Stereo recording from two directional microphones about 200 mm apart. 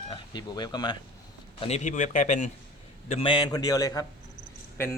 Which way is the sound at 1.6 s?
35° left (ahead or behind).